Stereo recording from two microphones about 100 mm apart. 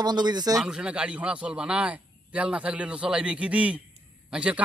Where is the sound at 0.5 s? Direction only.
5° right (ahead or behind).